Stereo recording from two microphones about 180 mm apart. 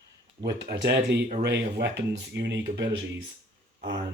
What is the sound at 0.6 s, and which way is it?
Speech, 65° right (ahead or behind).